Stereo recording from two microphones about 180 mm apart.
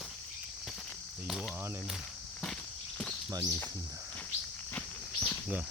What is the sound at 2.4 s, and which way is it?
Walk, 5° left (ahead or behind).